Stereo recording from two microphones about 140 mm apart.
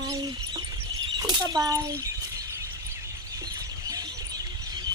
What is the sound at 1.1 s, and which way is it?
Speech, 30° right (ahead or behind).